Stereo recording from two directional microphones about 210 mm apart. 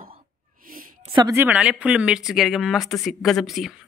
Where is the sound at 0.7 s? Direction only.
40° right (ahead or behind).